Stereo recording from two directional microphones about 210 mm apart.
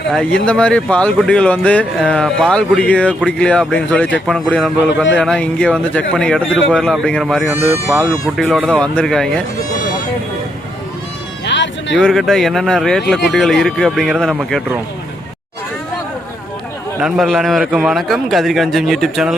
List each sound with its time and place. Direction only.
0.1 s speech: 5° left (ahead or behind)
11.4 s music: 60° left (ahead or behind)
11.9 s speech: 5° left (ahead or behind)
17.0 s speech: centre (ahead or behind)